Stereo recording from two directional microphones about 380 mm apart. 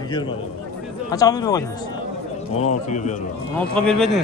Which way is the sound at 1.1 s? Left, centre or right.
Centre.